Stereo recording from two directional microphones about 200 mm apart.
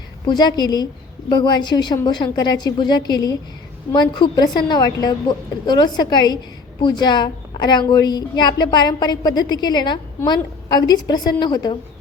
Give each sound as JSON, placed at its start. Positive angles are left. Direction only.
{"t": 0.3, "sound": "a woman's voice", "side_deg": 20}